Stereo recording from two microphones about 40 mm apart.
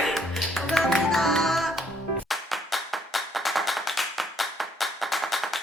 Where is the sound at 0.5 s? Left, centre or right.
Centre.